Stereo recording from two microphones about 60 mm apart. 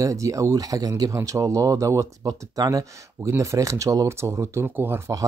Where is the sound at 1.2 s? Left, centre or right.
Right.